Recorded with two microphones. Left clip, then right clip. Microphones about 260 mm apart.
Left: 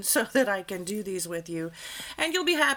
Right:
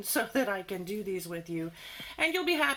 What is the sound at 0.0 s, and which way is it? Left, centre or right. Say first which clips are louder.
Speech: left 5 dB; left.